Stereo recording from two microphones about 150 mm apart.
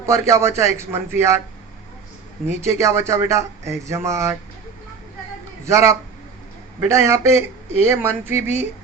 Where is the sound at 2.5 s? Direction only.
20° right (ahead or behind).